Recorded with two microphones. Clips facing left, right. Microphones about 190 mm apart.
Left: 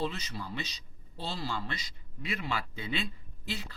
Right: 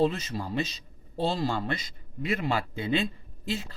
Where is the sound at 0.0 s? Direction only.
50° right (ahead or behind).